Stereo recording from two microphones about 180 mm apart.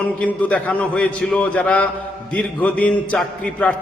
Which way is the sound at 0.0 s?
5° left (ahead or behind).